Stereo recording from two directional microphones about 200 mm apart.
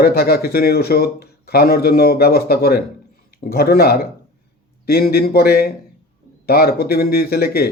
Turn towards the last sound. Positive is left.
turn(degrees=50)  # may be behind; listen again after turning